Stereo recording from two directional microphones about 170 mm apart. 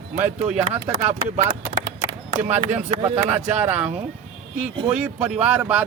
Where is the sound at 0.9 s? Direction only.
55° right (ahead or behind).